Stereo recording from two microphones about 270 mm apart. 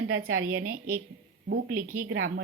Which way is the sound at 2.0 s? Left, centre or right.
Right.